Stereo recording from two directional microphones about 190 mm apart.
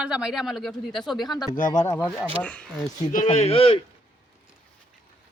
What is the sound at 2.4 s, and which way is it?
Speech, 5° left (ahead or behind).